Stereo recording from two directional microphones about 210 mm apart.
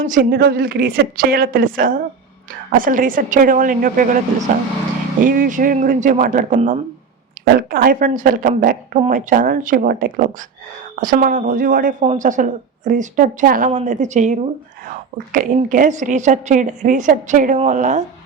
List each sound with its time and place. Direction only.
0.0 s a woman's voice: 40° right (ahead or behind)
5.2 s speech: 40° right (ahead or behind)
7.4 s a sound: 40° right (ahead or behind)
7.7 s speech: 40° right (ahead or behind)